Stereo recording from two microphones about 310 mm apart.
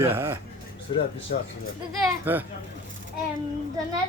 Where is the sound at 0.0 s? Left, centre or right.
Centre.